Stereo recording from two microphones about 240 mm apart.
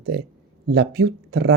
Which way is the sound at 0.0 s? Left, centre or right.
Right.